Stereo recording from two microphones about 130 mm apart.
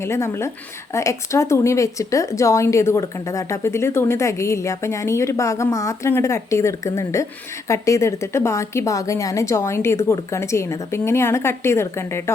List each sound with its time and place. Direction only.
0.0 s speech: 20° left (ahead or behind)